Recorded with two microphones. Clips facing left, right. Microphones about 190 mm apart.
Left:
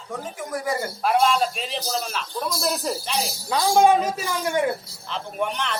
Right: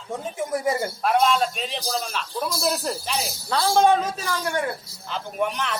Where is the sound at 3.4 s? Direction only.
15° left (ahead or behind).